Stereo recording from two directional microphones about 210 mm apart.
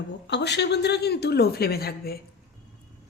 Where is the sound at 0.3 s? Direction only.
55° left (ahead or behind).